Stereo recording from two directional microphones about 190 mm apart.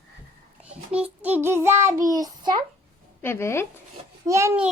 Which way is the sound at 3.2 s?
10° left (ahead or behind).